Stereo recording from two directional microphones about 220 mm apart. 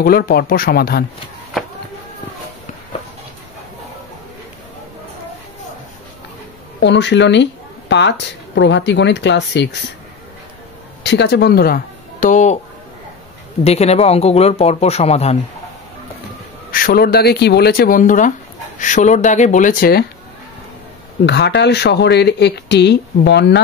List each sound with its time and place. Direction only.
0.0 s speech: 45° left (ahead or behind)
6.8 s speech: 50° left (ahead or behind)
11.1 s speech: 50° left (ahead or behind); by 12.5 s 35° left (ahead or behind)
13.7 s speech: 30° left (ahead or behind)
16.7 s speech: 40° left (ahead or behind)
21.3 s speech: 50° left (ahead or behind)